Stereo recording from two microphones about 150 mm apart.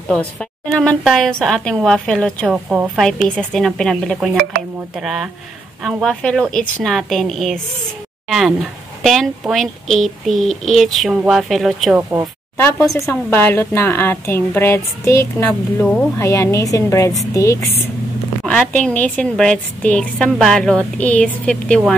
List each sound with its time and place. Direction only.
0.4 s a woman's voice: 5° left (ahead or behind)
12.5 s a woman's voice: 15° left (ahead or behind)